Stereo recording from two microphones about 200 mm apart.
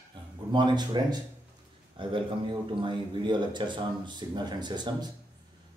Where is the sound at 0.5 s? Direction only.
25° right (ahead or behind).